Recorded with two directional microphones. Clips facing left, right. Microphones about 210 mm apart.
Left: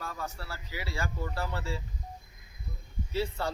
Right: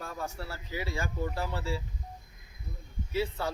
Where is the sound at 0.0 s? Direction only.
25° right (ahead or behind).